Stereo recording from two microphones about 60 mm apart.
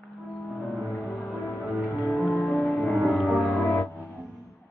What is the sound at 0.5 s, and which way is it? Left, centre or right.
Music, centre.